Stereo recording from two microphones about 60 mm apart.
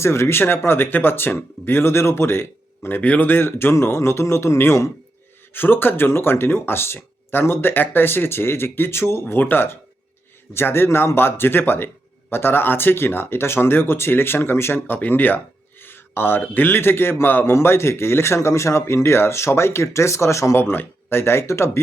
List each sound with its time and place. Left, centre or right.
0.0 s speech: left
3.0 s a man's voice: left
5.5 s speech: left
9.2 s a man's voice: left
20.6 s a man's voice: left